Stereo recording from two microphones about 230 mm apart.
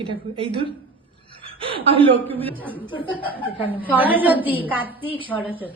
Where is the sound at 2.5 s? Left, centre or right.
Centre.